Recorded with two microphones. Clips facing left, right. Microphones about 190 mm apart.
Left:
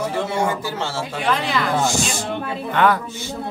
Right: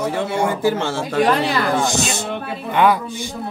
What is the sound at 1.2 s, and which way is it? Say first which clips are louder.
Speech: right 6 dB; 40° right (ahead or behind).